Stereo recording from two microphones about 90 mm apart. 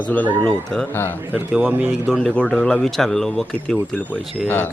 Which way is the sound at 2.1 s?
Centre (ahead or behind).